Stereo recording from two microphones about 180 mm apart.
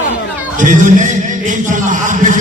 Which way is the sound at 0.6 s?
45° right (ahead or behind).